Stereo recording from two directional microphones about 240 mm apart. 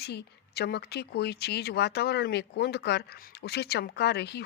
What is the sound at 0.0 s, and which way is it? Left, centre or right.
Speech, left.